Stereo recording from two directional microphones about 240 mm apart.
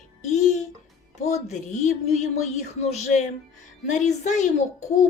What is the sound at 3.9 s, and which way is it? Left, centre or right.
Speech, left.